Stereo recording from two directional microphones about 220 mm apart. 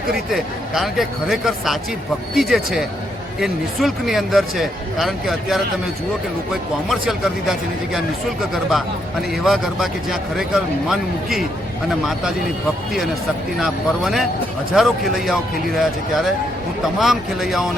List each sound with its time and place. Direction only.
0.7 s speech: centre (ahead or behind)
13.6 s speech: centre (ahead or behind)